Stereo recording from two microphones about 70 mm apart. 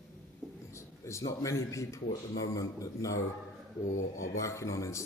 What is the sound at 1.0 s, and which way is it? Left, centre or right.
Speech, left.